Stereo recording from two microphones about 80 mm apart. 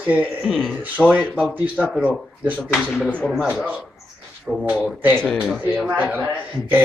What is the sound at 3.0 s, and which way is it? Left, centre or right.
Speech, centre.